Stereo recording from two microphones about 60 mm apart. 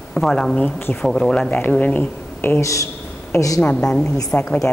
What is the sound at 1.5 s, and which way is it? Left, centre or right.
Speech, left.